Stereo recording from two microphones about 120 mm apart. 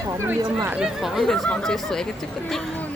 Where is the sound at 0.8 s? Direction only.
Centre (ahead or behind).